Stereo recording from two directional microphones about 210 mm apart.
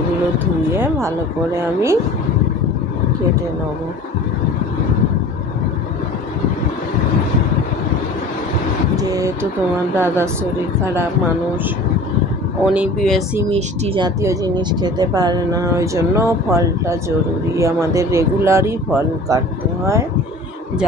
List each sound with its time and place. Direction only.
0.7 s speech: 10° right (ahead or behind)
8.9 s speech: 15° right (ahead or behind)
12.6 s speech: 5° right (ahead or behind)
13.5 s speech: 30° right (ahead or behind)